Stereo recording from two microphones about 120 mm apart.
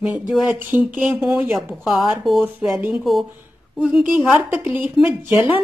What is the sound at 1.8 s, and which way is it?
Speech, centre (ahead or behind).